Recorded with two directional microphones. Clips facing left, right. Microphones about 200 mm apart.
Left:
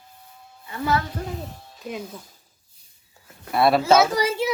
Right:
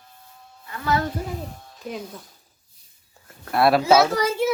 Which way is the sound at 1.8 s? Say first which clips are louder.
Even; 5° left (ahead or behind).